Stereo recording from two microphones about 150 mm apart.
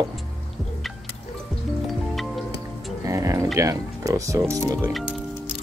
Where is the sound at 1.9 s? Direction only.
Centre (ahead or behind).